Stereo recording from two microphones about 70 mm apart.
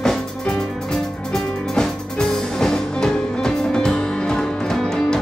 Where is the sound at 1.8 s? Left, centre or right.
Centre.